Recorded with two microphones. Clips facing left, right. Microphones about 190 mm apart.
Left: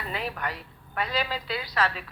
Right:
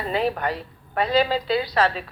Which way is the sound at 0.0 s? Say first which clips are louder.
Right 9 dB; 30° right (ahead or behind).